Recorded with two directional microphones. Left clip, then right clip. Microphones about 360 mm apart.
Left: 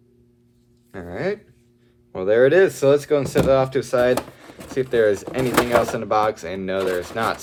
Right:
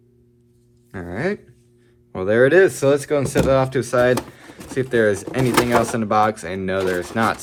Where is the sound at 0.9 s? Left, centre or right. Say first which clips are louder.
Right 1 dB; right.